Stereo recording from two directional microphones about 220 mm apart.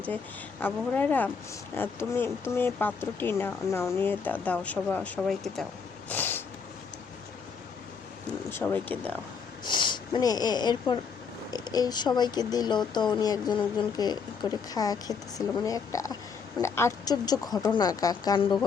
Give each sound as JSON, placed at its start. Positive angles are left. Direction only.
{"t": 0.6, "sound": "speech", "side_deg": 10}
{"t": 6.1, "sound": "snort", "side_deg": 10}
{"t": 8.4, "sound": "speech", "side_deg": 10}
{"t": 9.6, "sound": "speech", "side_deg": 20}